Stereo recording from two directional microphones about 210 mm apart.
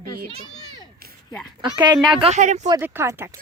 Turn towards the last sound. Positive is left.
turn(degrees=-15)  # may be behind; listen again after turning